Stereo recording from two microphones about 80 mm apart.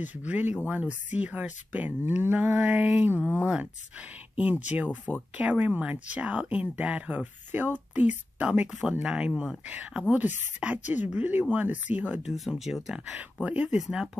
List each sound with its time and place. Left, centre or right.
0.0 s speech: centre
3.2 s speech: left
4.4 s speech: centre
12.3 s speech: centre
13.0 s speech: centre
13.7 s speech: centre